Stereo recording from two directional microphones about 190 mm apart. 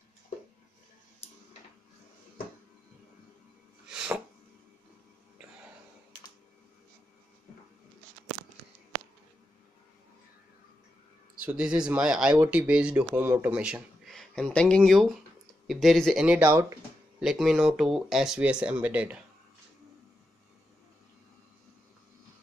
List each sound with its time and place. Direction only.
3.9 s a sound: 5° right (ahead or behind)
11.4 s speech: 5° right (ahead or behind)
17.2 s speech: centre (ahead or behind)